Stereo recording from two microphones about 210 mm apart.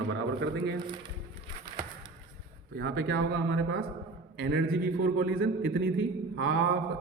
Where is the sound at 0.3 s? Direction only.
55° right (ahead or behind).